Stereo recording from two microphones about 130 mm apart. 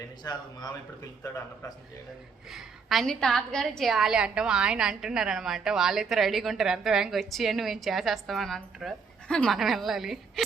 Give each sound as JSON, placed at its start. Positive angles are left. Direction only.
{"t": 0.2, "sound": "speech", "side_deg": 30}
{"t": 2.5, "sound": "a woman's voice", "side_deg": 0}